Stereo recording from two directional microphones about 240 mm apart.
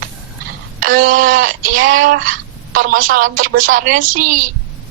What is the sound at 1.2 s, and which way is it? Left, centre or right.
Speech, right.